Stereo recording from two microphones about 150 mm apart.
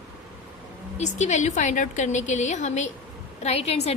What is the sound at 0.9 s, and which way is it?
A woman's voice, 50° left (ahead or behind).